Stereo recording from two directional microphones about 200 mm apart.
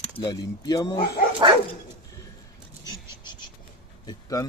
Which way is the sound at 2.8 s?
20° left (ahead or behind).